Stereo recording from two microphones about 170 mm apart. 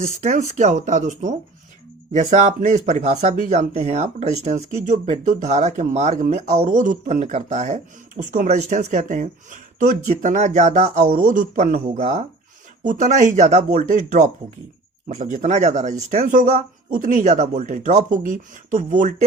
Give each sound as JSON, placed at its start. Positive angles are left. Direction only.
{"t": 0.2, "sound": "speech", "side_deg": -45}
{"t": 11.9, "sound": "speech", "side_deg": -40}